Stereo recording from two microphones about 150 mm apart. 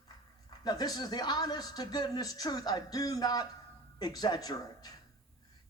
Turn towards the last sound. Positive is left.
turn(degrees=25)  # may be behind; listen again after turning